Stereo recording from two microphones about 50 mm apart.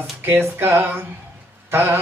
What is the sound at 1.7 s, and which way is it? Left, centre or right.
Mantra, right.